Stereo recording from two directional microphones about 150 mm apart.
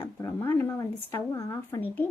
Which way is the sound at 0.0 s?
20° left (ahead or behind).